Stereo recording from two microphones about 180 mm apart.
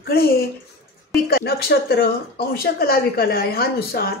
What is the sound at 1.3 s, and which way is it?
Speech, 60° left (ahead or behind).